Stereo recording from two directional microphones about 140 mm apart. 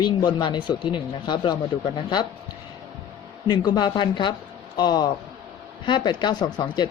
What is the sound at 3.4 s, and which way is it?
Speech, 35° left (ahead or behind).